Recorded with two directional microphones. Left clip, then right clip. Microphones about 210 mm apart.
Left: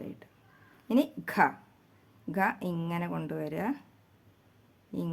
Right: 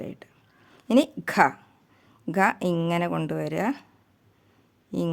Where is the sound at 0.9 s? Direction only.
45° right (ahead or behind).